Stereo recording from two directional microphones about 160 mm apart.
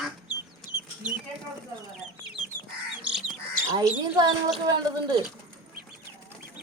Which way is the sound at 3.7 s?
25° right (ahead or behind).